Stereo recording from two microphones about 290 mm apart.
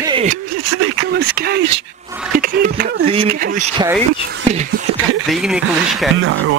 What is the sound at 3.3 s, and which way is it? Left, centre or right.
Speech, right.